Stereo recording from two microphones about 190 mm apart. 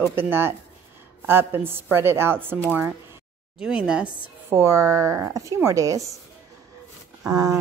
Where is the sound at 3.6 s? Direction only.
5° right (ahead or behind).